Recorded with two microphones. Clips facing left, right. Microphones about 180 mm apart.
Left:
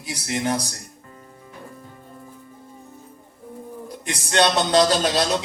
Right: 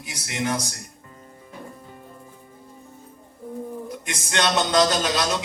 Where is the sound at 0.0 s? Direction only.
35° left (ahead or behind).